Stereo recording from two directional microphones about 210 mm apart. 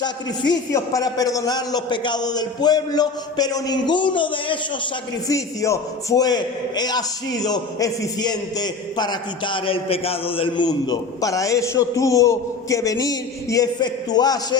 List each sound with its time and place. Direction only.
0.0 s a man's voice: 20° left (ahead or behind)